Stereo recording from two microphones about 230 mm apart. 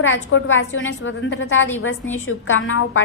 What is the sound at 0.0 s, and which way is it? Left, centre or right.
A woman's voice, left.